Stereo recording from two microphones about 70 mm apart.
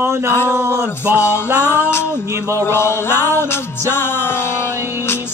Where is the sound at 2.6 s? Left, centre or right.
Left.